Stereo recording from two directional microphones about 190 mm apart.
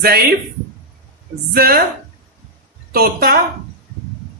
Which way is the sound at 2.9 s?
55° right (ahead or behind).